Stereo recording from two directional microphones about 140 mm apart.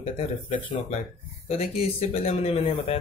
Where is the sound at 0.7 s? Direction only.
50° left (ahead or behind).